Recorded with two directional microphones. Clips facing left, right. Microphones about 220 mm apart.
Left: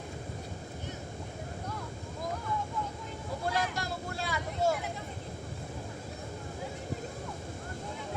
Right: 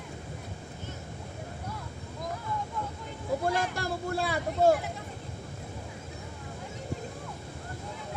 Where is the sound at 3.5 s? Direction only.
55° right (ahead or behind).